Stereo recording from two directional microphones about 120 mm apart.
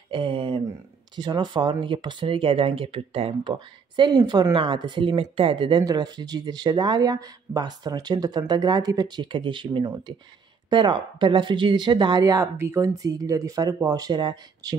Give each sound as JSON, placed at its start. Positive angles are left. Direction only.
{"t": 0.1, "sound": "speech", "side_deg": -45}
{"t": 3.5, "sound": "speech", "side_deg": -40}